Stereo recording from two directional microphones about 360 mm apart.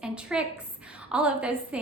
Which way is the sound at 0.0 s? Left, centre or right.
Centre.